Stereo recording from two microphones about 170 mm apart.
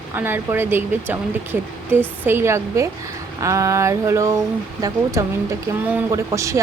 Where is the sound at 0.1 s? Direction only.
10° right (ahead or behind).